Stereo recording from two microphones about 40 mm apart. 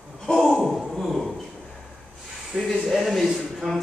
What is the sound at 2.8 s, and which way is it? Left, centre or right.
Speech, centre.